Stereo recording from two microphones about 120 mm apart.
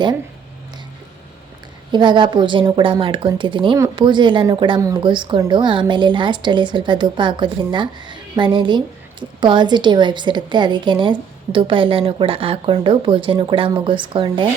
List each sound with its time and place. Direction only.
1.9 s a woman's voice: 40° right (ahead or behind)